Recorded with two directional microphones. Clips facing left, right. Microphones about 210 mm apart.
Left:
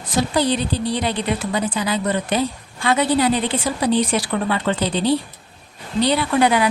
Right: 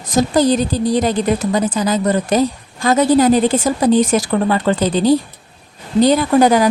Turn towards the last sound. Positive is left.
turn(degrees=-40)  # may be behind; listen again after turning